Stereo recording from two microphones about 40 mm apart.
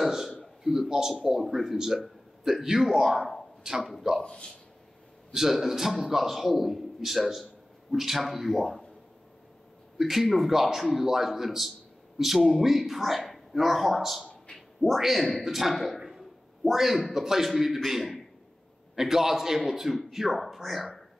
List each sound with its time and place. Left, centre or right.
0.0 s a sound: centre
0.7 s a man's voice: centre
3.2 s speech: centre
3.6 s a man's voice: centre
4.2 s speech: centre
5.3 s a man's voice: centre
9.9 s a man's voice: centre
15.7 s speech: centre
16.0 s a sound: centre
17.1 s a man's voice: centre